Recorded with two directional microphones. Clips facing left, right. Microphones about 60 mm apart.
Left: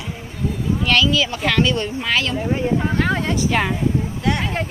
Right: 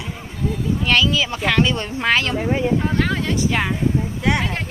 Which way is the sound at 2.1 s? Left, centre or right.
Right.